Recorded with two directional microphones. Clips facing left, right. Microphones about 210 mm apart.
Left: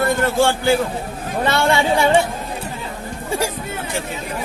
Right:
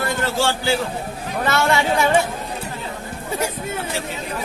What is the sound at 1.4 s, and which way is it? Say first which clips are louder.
Speech: left 2 dB; 30° left (ahead or behind).